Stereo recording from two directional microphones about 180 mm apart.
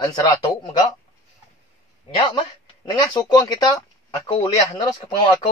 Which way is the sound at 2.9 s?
25° left (ahead or behind).